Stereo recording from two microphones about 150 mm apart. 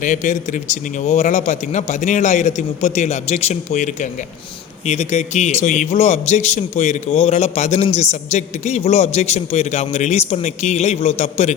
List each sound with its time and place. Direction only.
0.0 s a man's voice: 55° left (ahead or behind)